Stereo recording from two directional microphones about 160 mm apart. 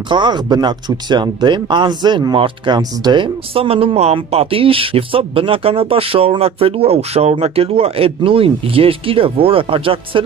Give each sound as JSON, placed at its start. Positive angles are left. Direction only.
{"t": 0.1, "sound": "speech", "side_deg": -25}